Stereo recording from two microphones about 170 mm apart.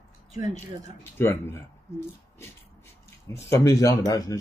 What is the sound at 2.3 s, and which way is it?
Speech, 15° left (ahead or behind).